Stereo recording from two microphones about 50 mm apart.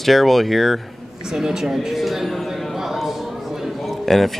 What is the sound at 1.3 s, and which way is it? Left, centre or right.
Speech, centre.